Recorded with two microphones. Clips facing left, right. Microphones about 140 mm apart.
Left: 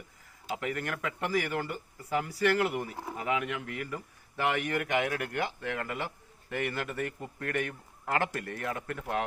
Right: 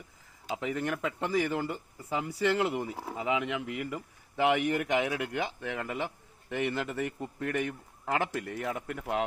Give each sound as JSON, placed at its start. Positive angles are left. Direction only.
{"t": 0.4, "sound": "speech", "side_deg": -20}